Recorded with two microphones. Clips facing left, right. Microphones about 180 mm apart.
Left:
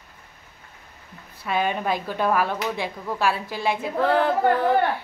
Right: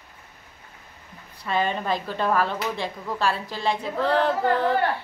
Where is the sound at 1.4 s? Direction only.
10° left (ahead or behind).